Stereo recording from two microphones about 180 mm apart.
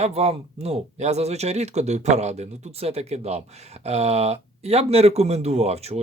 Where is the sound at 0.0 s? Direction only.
35° right (ahead or behind).